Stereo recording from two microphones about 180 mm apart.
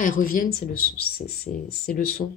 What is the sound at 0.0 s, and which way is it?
Speech, 50° left (ahead or behind).